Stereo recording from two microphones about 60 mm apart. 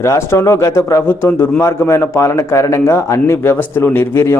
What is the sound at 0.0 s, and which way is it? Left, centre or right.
Speech, left.